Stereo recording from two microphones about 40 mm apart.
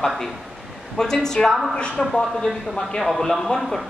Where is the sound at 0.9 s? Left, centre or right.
Centre.